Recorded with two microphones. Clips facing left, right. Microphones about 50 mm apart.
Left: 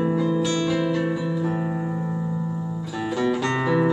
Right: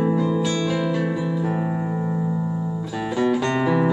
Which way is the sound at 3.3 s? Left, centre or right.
Centre.